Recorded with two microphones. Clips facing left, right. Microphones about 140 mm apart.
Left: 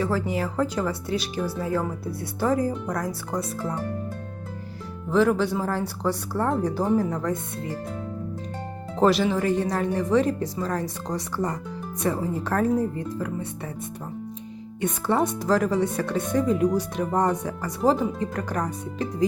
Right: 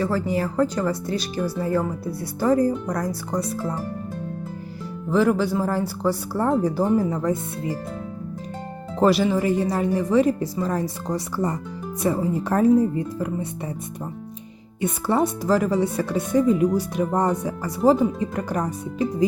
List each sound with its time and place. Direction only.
0.0 s speech: centre (ahead or behind)
5.1 s speech: 5° right (ahead or behind)
9.0 s speech: 5° right (ahead or behind)
14.8 s speech: 5° right (ahead or behind)